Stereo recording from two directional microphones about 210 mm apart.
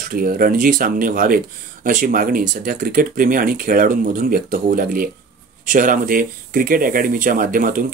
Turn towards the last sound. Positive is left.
turn(degrees=-40)  # may be behind; listen again after turning